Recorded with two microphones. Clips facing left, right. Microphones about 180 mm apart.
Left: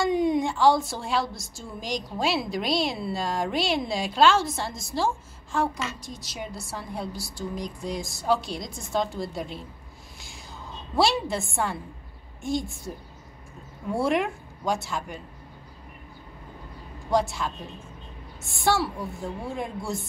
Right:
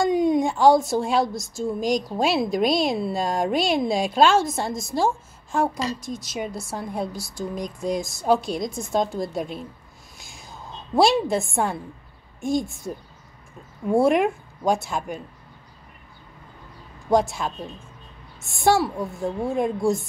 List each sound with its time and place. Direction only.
0.0 s a woman's voice: 45° right (ahead or behind)
11.0 s a woman's voice: 50° right (ahead or behind)
13.9 s a woman's voice: 50° right (ahead or behind)
17.1 s a woman's voice: 50° right (ahead or behind)
18.6 s a woman's voice: 50° right (ahead or behind)